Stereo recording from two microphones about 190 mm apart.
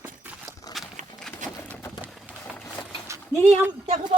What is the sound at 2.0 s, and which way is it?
Run, 5° right (ahead or behind).